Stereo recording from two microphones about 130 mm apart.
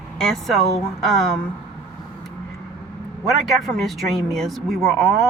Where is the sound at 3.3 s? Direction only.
Centre (ahead or behind).